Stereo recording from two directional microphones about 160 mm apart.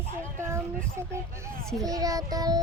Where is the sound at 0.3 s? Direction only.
15° right (ahead or behind).